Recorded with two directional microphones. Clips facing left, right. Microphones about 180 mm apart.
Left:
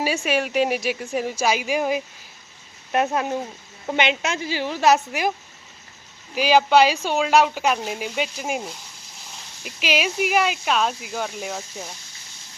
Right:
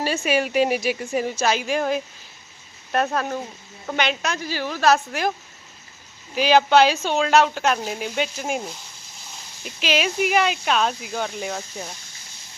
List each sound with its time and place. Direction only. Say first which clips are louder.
0.2 s a woman's voice: right 1 dB; centre (ahead or behind); by 5.3 s 15° left (ahead or behind)
6.3 s speech: even; 5° left (ahead or behind)